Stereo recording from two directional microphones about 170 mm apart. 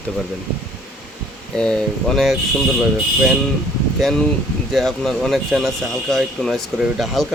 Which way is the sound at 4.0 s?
Centre (ahead or behind).